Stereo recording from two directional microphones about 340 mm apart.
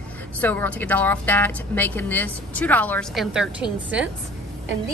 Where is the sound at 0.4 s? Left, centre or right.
Centre.